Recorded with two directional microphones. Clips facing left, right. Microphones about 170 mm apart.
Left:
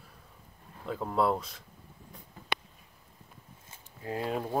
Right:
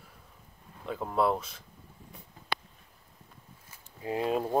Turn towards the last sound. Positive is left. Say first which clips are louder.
# right 4 dB
turn(degrees=-20)  # may be behind; listen again after turning